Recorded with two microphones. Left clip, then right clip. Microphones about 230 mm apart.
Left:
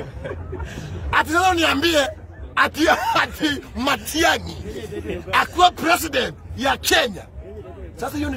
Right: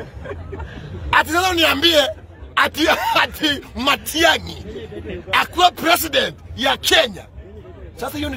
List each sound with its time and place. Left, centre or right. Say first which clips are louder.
0.7 s a man's voice: left 1 dB; left
1.1 s a man's voice: right 1 dB; centre
4.7 s speech: left 3 dB; left
5.3 s a man's voice: right 1 dB; centre